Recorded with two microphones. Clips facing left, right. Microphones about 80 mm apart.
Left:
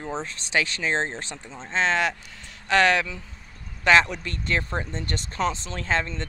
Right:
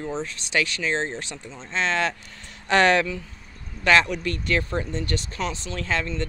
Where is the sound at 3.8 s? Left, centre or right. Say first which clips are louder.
Even; centre.